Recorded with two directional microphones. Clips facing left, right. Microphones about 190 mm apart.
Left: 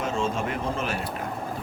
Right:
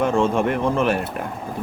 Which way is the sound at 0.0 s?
55° right (ahead or behind).